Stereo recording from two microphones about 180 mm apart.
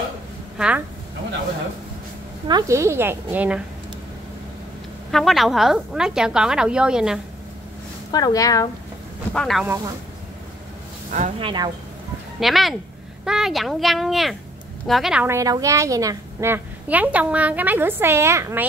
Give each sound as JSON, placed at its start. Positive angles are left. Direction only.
{"t": 0.6, "sound": "a woman's voice", "side_deg": -5}
{"t": 2.4, "sound": "a woman's voice", "side_deg": -20}
{"t": 5.1, "sound": "a woman's voice", "side_deg": 0}
{"t": 8.1, "sound": "a woman's voice", "side_deg": 20}
{"t": 9.3, "sound": "a woman's voice", "side_deg": 5}
{"t": 11.1, "sound": "speech", "side_deg": -45}
{"t": 11.3, "sound": "speech", "side_deg": -25}
{"t": 12.4, "sound": "a woman's voice", "side_deg": 0}
{"t": 15.2, "sound": "a woman's voice", "side_deg": -20}